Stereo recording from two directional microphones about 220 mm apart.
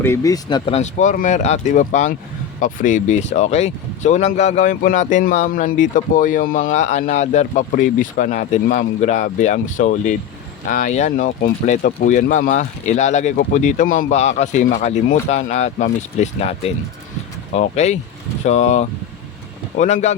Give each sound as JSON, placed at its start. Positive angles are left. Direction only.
{"t": 0.0, "sound": "speech", "side_deg": 10}
{"t": 0.6, "sound": "speech", "side_deg": 30}